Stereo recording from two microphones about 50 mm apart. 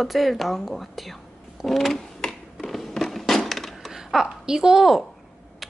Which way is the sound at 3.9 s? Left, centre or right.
Centre.